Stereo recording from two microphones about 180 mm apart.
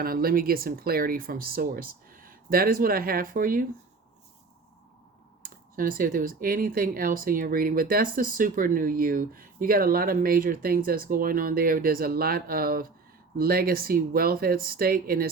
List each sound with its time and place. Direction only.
0.0 s speech: 55° right (ahead or behind)
5.4 s speech: 50° right (ahead or behind)